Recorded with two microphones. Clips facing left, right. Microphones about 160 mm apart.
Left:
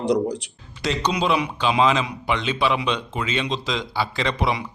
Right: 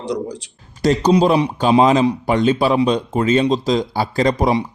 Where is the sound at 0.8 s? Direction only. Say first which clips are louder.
Right 9 dB; 45° right (ahead or behind).